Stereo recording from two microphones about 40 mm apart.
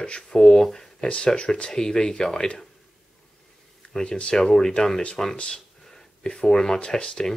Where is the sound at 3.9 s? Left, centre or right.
Centre.